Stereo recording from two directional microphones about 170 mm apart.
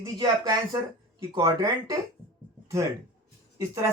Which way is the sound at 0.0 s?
20° right (ahead or behind).